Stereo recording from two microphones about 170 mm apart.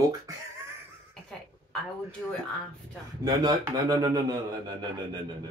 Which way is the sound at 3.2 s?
20° right (ahead or behind).